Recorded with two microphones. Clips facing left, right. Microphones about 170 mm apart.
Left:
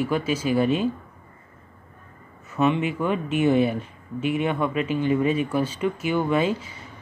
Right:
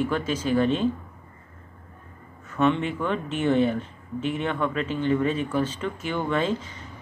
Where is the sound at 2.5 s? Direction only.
10° left (ahead or behind).